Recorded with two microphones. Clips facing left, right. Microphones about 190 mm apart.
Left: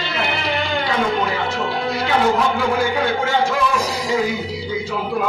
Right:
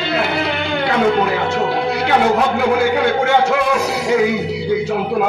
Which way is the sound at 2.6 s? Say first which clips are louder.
Right 4 dB; 65° right (ahead or behind).